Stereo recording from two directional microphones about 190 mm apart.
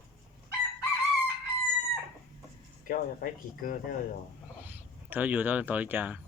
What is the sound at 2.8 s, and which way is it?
Speech, 45° left (ahead or behind).